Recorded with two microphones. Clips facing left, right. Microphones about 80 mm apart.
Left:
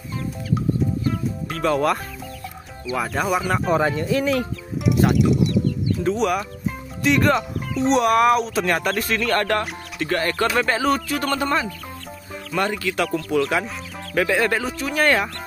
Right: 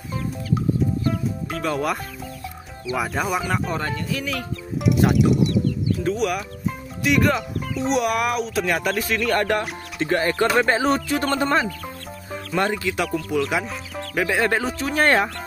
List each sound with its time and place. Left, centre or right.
1.5 s speech: centre
4.1 s speech: left
4.8 s speech: centre
9.3 s speech: centre
13.1 s speech: centre
14.1 s speech: centre